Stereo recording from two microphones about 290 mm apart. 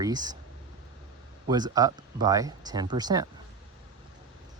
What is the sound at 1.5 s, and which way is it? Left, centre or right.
Speech, centre.